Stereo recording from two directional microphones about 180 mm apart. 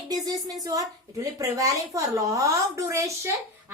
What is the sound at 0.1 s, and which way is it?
A woman's voice, 20° right (ahead or behind).